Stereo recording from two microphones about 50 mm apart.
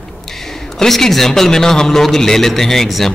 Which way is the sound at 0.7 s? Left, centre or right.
Centre.